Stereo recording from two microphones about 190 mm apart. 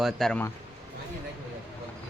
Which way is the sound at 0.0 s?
Centre (ahead or behind).